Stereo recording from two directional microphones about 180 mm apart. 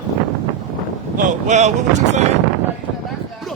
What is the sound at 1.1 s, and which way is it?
Speech, 40° right (ahead or behind).